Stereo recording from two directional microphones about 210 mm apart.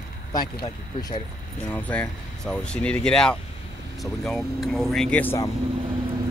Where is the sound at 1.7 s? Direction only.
5° left (ahead or behind).